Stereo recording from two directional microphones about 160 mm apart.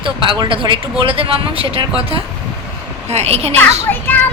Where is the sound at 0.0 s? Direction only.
30° right (ahead or behind).